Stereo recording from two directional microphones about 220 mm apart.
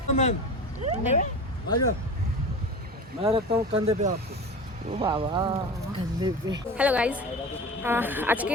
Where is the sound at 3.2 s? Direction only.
25° right (ahead or behind).